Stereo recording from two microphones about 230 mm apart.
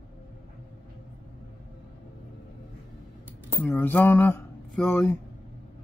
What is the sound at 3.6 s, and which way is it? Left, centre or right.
Speech, centre.